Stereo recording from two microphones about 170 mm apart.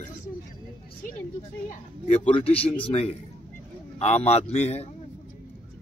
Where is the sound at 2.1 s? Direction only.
35° left (ahead or behind).